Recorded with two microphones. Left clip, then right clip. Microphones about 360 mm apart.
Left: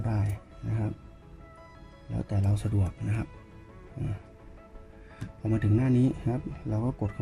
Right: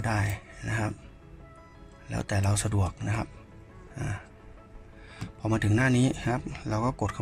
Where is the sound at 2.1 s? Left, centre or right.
Right.